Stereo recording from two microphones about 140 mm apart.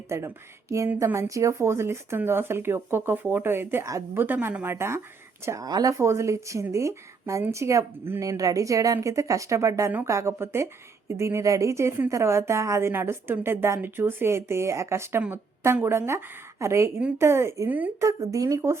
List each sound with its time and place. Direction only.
0.1 s speech: 20° right (ahead or behind)